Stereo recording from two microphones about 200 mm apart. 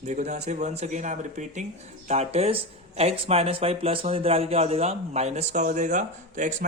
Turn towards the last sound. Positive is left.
turn(degrees=-40)  # may be behind; listen again after turning